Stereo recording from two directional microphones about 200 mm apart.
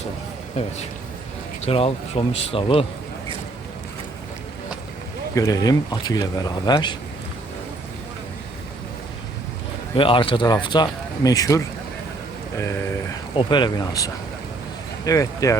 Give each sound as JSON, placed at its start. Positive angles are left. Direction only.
{"t": 1.6, "sound": "speech", "side_deg": 30}
{"t": 5.3, "sound": "speech", "side_deg": 15}
{"t": 9.9, "sound": "speech", "side_deg": 25}
{"t": 13.3, "sound": "speech", "side_deg": 25}